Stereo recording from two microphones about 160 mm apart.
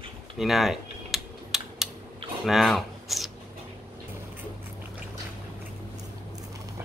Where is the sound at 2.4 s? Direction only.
Centre (ahead or behind).